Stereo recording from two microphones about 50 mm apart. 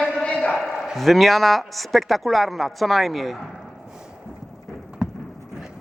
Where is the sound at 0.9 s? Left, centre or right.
Centre.